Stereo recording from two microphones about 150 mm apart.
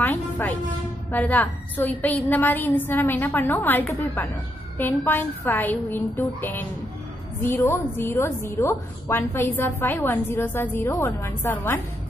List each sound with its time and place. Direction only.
0.0 s a woman's voice: 10° left (ahead or behind)